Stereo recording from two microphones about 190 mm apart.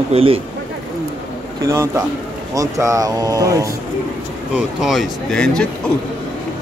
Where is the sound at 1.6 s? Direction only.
15° right (ahead or behind).